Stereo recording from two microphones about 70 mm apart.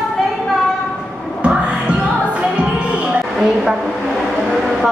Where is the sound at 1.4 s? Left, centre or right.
Centre.